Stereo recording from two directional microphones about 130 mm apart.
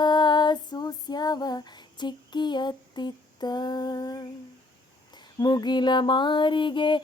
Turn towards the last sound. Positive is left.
turn(degrees=40)  # may be behind; listen again after turning